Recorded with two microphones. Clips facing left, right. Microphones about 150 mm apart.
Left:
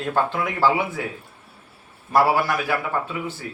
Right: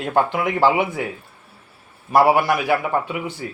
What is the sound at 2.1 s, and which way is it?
Speech, 15° right (ahead or behind).